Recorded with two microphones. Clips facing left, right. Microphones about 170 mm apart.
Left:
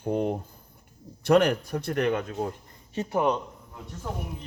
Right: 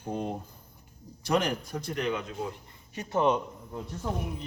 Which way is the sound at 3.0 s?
15° left (ahead or behind).